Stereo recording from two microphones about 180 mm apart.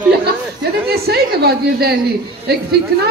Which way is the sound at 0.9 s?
60° right (ahead or behind).